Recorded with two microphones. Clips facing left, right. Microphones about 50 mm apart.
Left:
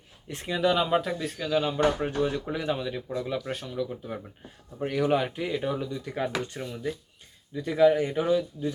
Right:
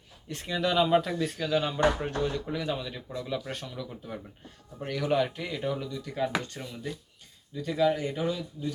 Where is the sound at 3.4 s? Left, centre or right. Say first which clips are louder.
Left 6 dB; centre; by 6.2 s left.